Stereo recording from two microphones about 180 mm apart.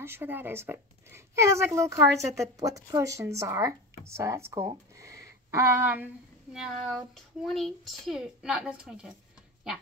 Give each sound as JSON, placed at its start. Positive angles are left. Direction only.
{"t": 0.0, "sound": "a woman's voice", "side_deg": -10}